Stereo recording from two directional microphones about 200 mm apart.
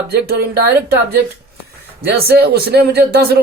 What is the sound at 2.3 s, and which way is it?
Speech, 50° right (ahead or behind).